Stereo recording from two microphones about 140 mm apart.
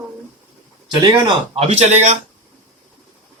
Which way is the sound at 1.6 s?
45° right (ahead or behind).